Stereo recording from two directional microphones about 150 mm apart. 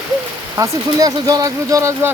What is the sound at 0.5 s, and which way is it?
Speech, 20° right (ahead or behind).